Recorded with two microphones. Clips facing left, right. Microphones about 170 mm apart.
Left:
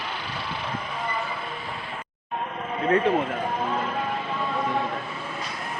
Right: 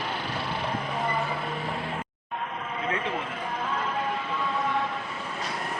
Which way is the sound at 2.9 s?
45° left (ahead or behind).